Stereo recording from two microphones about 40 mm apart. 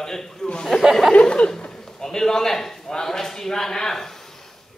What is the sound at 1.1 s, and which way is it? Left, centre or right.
Speech, left.